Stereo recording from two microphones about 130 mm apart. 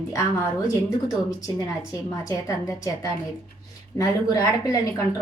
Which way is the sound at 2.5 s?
25° left (ahead or behind).